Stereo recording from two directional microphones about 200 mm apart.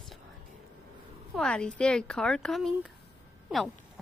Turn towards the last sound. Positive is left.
turn(degrees=0)  # may be behind; listen again after turning